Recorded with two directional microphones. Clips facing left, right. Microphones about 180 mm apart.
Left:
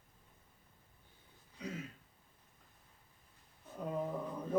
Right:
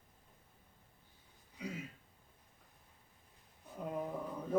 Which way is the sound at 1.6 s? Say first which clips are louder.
Even; 10° right (ahead or behind).